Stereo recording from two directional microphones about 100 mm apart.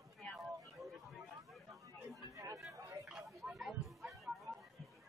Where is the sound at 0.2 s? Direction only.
5° left (ahead or behind).